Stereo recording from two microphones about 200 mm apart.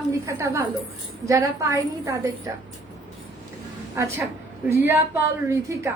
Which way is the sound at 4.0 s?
10° right (ahead or behind).